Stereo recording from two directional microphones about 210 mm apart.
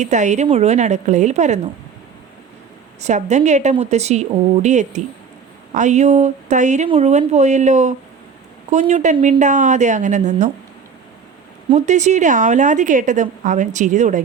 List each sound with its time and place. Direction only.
0.0 s a woman's voice: 35° right (ahead or behind)
3.0 s a woman's voice: 35° right (ahead or behind)
11.7 s a woman's voice: 35° right (ahead or behind)